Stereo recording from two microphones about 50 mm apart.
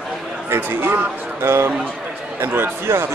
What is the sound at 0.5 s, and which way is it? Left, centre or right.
A man's voice, right.